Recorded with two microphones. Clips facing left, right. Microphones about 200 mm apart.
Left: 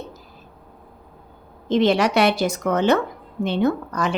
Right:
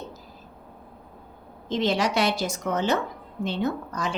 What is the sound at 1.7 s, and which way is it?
A woman's voice, 65° left (ahead or behind).